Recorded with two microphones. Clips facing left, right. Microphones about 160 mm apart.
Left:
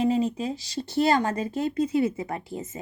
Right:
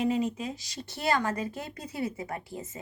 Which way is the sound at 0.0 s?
30° left (ahead or behind).